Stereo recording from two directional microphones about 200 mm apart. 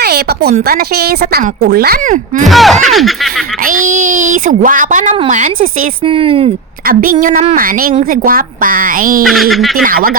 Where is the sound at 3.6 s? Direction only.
45° right (ahead or behind).